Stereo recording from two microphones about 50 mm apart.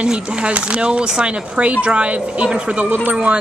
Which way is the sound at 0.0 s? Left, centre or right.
Right.